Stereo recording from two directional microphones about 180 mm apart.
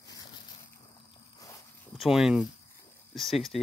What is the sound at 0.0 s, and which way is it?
Boat, 20° left (ahead or behind).